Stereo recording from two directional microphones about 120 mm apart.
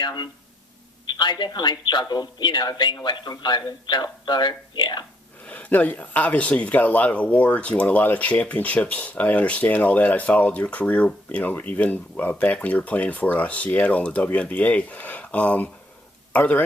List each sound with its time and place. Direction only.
0.0 s speech: 35° left (ahead or behind)
5.5 s speech: 10° left (ahead or behind)